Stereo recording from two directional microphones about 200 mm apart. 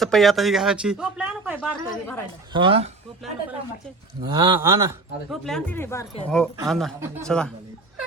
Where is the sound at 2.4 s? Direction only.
25° right (ahead or behind).